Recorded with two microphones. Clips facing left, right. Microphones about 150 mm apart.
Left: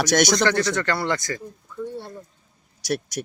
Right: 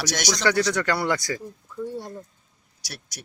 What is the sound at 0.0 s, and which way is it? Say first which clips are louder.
Speech: left 8 dB; 50° left (ahead or behind).